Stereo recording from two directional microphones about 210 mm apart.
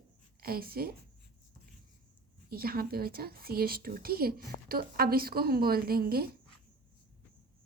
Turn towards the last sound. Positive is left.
turn(degrees=-45)  # may be behind; listen again after turning